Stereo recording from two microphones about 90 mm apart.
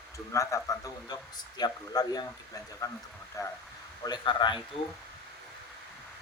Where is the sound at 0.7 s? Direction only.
40° left (ahead or behind).